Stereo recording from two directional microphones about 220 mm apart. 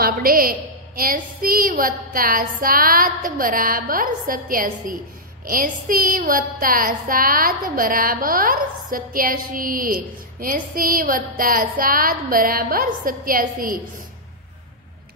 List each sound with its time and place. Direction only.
0.0 s a woman's voice: 40° right (ahead or behind)